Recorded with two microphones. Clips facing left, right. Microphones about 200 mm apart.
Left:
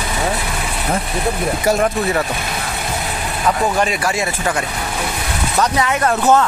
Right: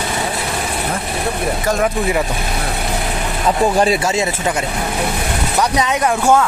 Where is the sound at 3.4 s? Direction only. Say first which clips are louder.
Right 3 dB; 30° right (ahead or behind).